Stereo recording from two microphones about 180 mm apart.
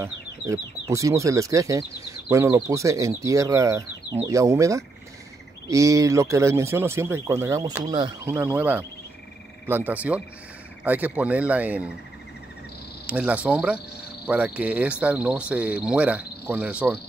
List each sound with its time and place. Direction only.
0.0 s speech: 15° right (ahead or behind)
8.3 s speech: 10° right (ahead or behind)
13.0 s speech: 5° right (ahead or behind)